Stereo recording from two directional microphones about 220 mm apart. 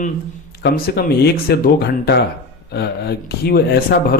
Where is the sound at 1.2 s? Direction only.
45° left (ahead or behind).